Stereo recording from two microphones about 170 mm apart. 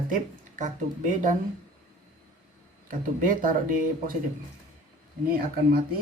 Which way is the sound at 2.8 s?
50° right (ahead or behind).